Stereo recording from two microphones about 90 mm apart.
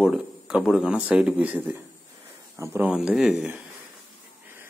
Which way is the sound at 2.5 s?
35° right (ahead or behind).